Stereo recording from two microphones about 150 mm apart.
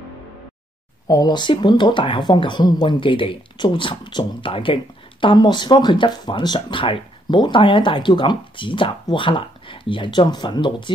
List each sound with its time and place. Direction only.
1.0 s speech: 25° left (ahead or behind)